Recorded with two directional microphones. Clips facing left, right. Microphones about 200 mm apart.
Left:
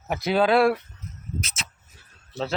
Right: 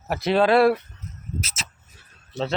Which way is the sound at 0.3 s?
Centre (ahead or behind).